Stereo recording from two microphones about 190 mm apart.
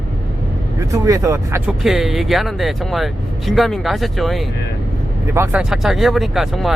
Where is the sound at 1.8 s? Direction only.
Centre (ahead or behind).